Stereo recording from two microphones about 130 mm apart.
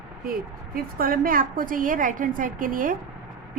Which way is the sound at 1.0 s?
90° right.